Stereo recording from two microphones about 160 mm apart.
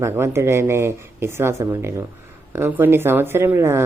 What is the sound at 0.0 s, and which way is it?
Speech, 15° right (ahead or behind).